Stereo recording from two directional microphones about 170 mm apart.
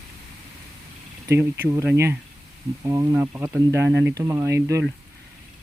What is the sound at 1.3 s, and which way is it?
Speech, 15° right (ahead or behind).